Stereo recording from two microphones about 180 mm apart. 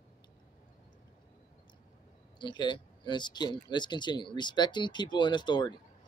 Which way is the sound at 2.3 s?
25° left (ahead or behind).